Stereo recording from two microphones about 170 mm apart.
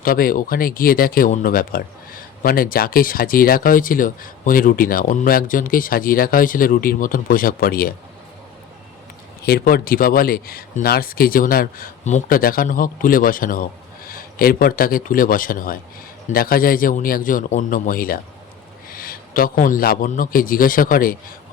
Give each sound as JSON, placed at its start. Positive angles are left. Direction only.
{"t": 0.0, "sound": "speech", "side_deg": 60}
{"t": 9.4, "sound": "a man's voice", "side_deg": 65}